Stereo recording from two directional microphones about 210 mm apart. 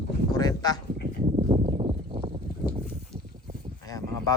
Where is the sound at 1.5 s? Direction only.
25° right (ahead or behind).